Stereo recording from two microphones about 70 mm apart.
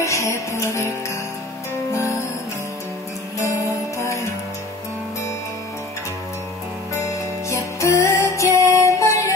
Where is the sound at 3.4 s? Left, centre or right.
Left.